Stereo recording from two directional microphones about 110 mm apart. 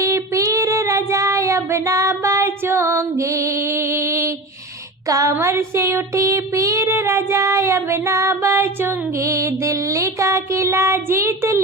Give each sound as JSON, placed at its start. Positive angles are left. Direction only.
{"t": 0.0, "sound": "child singing", "side_deg": -30}